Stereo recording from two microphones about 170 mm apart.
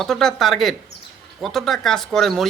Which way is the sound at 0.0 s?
5° left (ahead or behind).